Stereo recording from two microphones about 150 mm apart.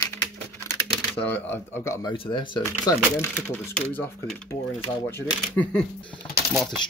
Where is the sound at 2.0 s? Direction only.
35° left (ahead or behind).